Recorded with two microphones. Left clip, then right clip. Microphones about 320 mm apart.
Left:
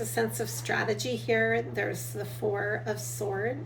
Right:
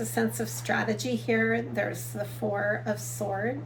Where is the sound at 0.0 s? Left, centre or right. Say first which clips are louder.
Even; centre.